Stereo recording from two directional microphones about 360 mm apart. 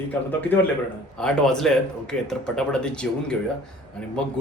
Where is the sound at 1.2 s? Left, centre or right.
Centre.